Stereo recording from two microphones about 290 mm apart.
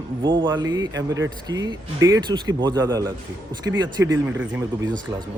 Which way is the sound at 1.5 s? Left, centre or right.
Centre.